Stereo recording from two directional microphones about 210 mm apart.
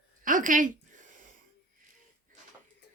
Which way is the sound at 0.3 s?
40° right (ahead or behind).